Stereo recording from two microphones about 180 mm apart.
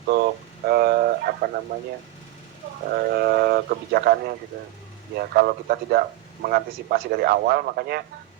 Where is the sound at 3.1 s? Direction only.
60° right (ahead or behind).